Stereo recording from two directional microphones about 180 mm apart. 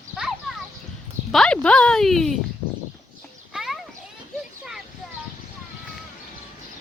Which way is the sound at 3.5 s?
Centre (ahead or behind).